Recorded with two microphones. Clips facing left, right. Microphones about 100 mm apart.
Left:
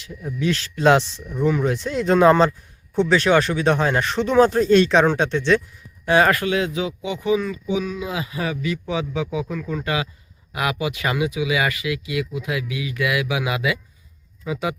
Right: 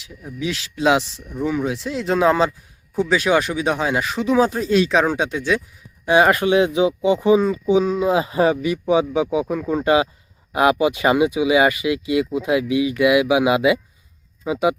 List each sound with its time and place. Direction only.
0.0 s speech: centre (ahead or behind); by 14.8 s 20° right (ahead or behind)